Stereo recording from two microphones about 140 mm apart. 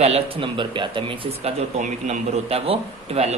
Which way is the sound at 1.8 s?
60° right (ahead or behind).